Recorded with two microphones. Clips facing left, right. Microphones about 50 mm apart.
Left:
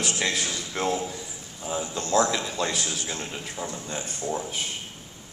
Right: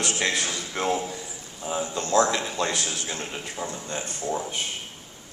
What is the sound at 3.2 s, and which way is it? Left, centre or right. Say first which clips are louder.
A man's voice: right 1 dB; centre.